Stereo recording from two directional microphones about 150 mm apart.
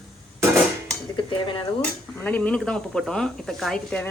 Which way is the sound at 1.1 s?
35° left (ahead or behind).